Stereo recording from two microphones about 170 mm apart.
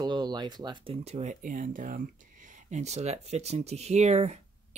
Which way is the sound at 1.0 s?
40° right (ahead or behind).